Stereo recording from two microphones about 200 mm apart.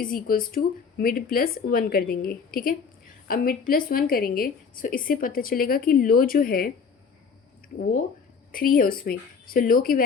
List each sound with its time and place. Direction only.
0.0 s a woman's voice: 45° left (ahead or behind)
8.5 s a woman's voice: 45° left (ahead or behind)